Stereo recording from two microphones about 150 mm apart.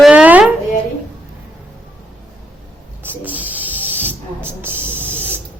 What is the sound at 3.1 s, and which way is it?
Spray, 10° right (ahead or behind).